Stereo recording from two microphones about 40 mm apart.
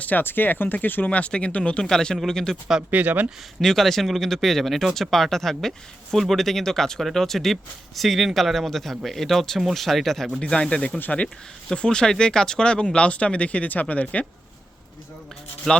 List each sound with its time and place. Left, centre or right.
0.0 s speech: left
1.1 s speech: left
1.8 s speech: centre
2.9 s speech: right
3.6 s speech: centre
10.4 s speech: left
15.7 s speech: centre